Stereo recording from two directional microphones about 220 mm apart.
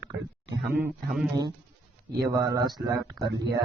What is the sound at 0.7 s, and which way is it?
Speech, 5° right (ahead or behind).